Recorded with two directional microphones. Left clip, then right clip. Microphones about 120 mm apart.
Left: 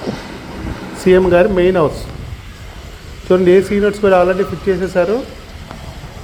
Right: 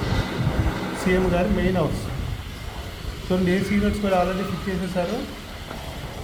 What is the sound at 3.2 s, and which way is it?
Speech, 40° left (ahead or behind).